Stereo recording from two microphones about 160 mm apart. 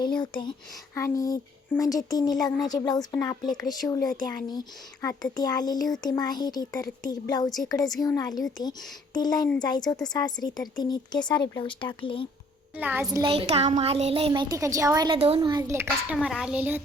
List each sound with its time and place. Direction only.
0.0 s a sound: 30° left (ahead or behind)
0.9 s speech: 20° left (ahead or behind)
12.7 s a woman's voice: 10° right (ahead or behind)
13.1 s a woman's voice: 25° right (ahead or behind)
13.3 s speech: 40° right (ahead or behind)
14.5 s a woman's voice: 20° right (ahead or behind)
15.1 s speech: 40° right (ahead or behind)
15.4 s a woman's voice: 25° right (ahead or behind); by 16.8 s 10° right (ahead or behind)